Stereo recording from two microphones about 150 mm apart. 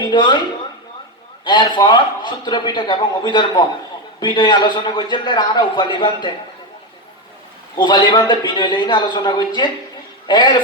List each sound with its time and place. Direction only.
0.0 s speech: 30° left (ahead or behind)
1.5 s a man's voice: 30° left (ahead or behind)
7.8 s a man's voice: 30° left (ahead or behind)